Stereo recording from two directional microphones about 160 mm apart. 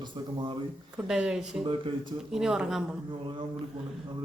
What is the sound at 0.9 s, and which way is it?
Speech, 5° right (ahead or behind).